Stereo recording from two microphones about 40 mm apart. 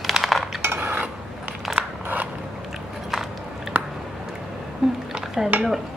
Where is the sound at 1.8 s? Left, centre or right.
Right.